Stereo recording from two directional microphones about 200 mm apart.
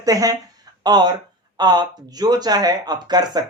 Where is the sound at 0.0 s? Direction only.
20° right (ahead or behind).